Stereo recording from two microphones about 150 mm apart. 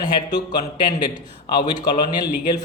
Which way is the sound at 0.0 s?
25° left (ahead or behind).